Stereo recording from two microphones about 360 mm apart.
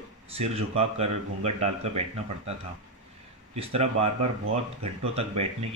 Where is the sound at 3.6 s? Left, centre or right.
Centre.